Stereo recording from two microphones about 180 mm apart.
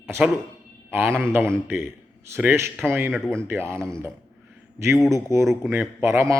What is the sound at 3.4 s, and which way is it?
Speech, 15° right (ahead or behind).